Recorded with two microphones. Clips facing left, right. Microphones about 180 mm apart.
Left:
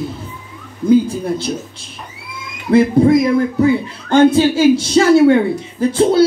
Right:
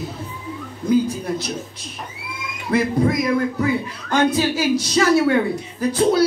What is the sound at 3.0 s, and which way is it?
A woman's voice, 30° left (ahead or behind).